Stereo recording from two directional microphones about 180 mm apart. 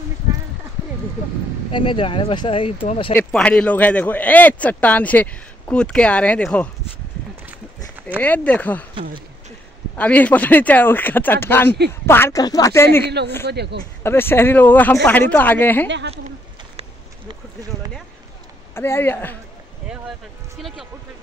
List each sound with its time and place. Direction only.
1.7 s speech: 30° left (ahead or behind)
3.1 s speech: 10° left (ahead or behind)
7.4 s run: 10° right (ahead or behind)
8.2 s speech: 10° left (ahead or behind)
9.9 s speech: 10° left (ahead or behind)
13.5 s a man's voice: 65° right (ahead or behind)
14.0 s speech: 10° left (ahead or behind)
16.1 s a sound: 35° right (ahead or behind)
18.8 s speech: 10° left (ahead or behind)